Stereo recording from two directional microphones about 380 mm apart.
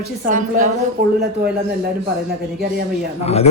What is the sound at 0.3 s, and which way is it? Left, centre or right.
Speech, right.